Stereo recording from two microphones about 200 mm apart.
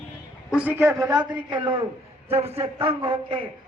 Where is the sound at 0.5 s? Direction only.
10° right (ahead or behind).